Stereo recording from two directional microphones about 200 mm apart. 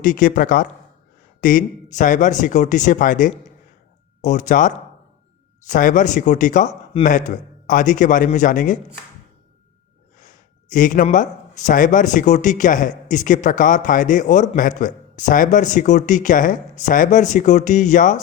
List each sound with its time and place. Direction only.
0.0 s speech: 40° left (ahead or behind)
10.2 s speech: 40° left (ahead or behind)